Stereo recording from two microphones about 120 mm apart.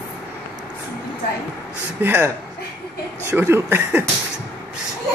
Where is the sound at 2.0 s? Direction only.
15° right (ahead or behind).